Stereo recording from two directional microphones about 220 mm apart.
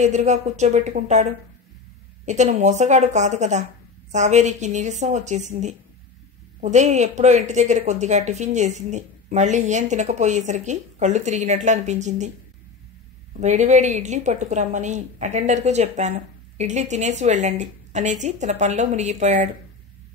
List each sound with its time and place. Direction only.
0.0 s a woman's voice: 30° right (ahead or behind)
13.4 s a woman's voice: 30° right (ahead or behind)